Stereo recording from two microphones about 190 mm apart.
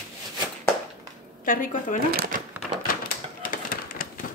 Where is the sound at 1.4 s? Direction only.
45° left (ahead or behind).